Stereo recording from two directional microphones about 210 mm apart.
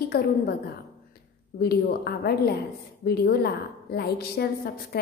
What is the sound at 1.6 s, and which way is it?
A woman's voice, 50° left (ahead or behind).